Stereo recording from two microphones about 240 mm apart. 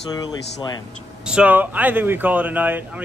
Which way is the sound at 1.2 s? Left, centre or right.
Centre.